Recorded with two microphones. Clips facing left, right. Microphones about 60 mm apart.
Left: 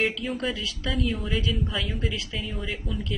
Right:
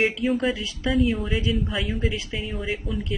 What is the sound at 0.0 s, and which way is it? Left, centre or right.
Speech, centre.